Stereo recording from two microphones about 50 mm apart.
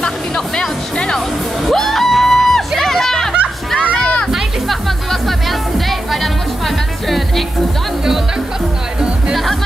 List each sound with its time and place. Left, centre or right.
0.6 s music: centre
1.6 s music: centre
3.8 s a sound: left
4.3 s music: centre
9.3 s music: centre